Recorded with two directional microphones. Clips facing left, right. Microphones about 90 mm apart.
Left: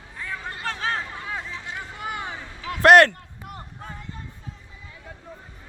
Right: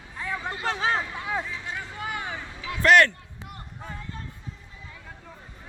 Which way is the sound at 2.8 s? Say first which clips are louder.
Left 5 dB; 60° left (ahead or behind).